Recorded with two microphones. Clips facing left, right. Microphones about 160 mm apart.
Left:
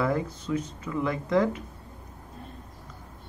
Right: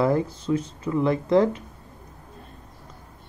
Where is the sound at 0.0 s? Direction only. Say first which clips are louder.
Right 5 dB; 30° right (ahead or behind).